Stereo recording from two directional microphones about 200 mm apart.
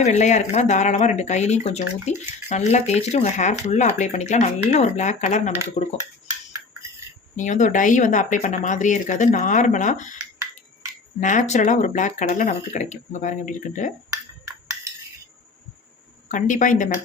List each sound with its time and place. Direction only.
0.0 s speech: 35° left (ahead or behind)
7.3 s speech: 40° left (ahead or behind)
11.2 s speech: 40° left (ahead or behind)
14.4 s a sound: 15° right (ahead or behind)
16.3 s speech: 40° left (ahead or behind)